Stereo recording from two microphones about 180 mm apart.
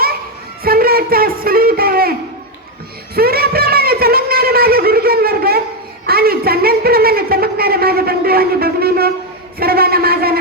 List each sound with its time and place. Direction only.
0.6 s speech: 55° right (ahead or behind)
3.2 s a sound: 60° right (ahead or behind)
9.6 s a man's voice: 60° right (ahead or behind)